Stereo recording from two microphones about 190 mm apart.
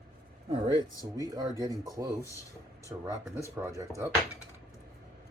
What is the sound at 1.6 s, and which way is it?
Speech, 15° right (ahead or behind).